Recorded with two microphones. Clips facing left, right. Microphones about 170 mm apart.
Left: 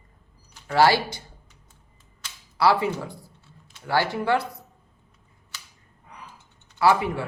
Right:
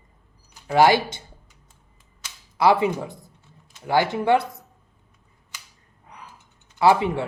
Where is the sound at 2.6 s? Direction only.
20° right (ahead or behind).